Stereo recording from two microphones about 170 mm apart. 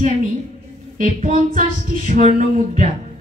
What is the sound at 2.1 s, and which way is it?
Speech, 45° right (ahead or behind).